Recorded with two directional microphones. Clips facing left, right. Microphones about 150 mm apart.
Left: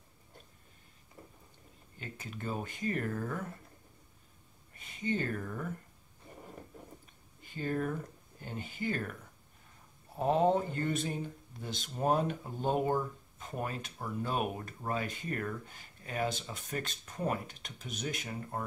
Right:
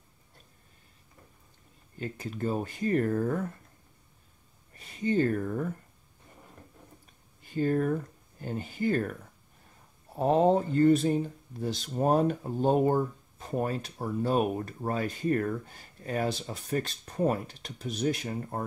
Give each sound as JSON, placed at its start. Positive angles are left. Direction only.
{"t": 2.0, "sound": "speech", "side_deg": -40}
{"t": 4.7, "sound": "speech", "side_deg": -40}
{"t": 7.4, "sound": "speech", "side_deg": -40}
{"t": 10.1, "sound": "speech", "side_deg": -35}